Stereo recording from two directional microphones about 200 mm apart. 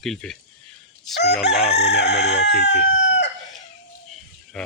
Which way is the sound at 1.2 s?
60° left (ahead or behind).